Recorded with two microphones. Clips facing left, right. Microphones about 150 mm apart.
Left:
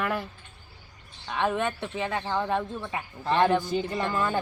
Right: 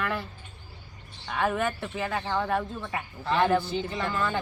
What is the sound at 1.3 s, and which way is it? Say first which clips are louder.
Speech: even; 20° left (ahead or behind).